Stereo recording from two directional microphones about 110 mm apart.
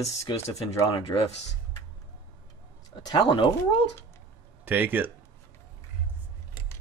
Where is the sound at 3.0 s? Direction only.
40° left (ahead or behind).